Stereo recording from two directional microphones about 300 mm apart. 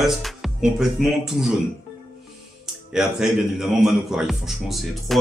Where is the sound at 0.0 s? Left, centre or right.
Centre.